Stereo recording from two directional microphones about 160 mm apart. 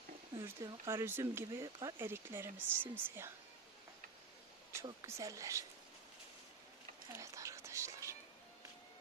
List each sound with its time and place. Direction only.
0.4 s speech: 20° right (ahead or behind)
4.8 s speech: 20° right (ahead or behind)
7.1 s whispering: 20° right (ahead or behind)